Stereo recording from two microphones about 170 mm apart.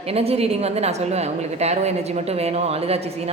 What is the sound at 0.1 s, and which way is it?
A woman's voice, 35° right (ahead or behind).